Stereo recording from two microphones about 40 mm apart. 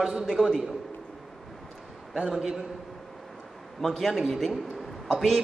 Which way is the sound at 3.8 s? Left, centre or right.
Centre.